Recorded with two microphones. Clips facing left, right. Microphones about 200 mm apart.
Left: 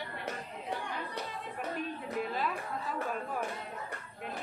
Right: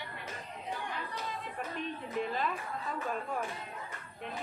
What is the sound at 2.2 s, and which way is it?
Speech, 5° left (ahead or behind).